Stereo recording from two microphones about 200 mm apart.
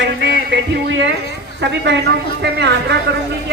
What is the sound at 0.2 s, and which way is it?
Music, 60° right (ahead or behind).